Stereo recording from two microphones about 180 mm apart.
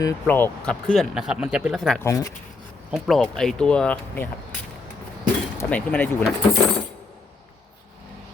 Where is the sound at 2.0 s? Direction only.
15° left (ahead or behind).